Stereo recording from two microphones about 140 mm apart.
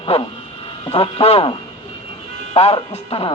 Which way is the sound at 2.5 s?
45° left (ahead or behind).